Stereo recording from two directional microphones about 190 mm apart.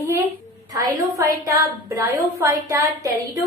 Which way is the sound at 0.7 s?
15° right (ahead or behind).